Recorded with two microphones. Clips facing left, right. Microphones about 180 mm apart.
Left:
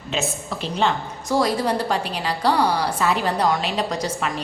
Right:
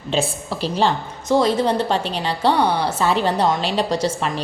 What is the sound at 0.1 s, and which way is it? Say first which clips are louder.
A woman's voice: right 4 dB; 30° right (ahead or behind).